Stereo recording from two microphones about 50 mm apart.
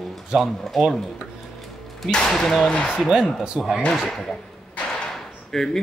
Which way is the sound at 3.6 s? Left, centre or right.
Right.